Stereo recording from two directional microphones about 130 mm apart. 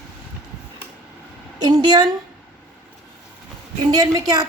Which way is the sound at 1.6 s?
30° right (ahead or behind).